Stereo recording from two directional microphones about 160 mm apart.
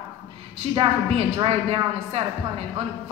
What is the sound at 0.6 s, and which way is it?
A woman's voice, 35° right (ahead or behind).